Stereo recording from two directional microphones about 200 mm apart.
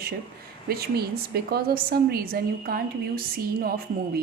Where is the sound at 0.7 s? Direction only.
50° right (ahead or behind).